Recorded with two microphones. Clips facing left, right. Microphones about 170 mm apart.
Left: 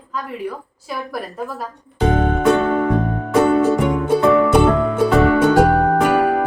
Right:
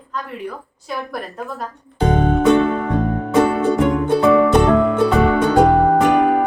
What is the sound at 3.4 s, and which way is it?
Music, 5° left (ahead or behind).